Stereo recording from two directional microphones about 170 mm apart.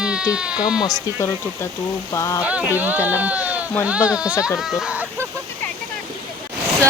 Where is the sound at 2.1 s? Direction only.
20° left (ahead or behind).